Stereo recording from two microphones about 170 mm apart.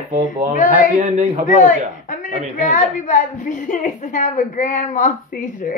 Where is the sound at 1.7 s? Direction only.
50° left (ahead or behind).